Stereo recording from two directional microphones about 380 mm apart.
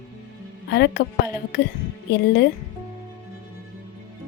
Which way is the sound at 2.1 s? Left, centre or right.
Left.